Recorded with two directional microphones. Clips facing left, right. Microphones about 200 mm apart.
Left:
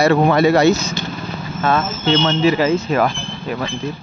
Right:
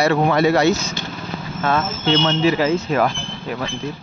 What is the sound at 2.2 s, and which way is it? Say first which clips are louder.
Speech: left 2 dB; 65° left (ahead or behind).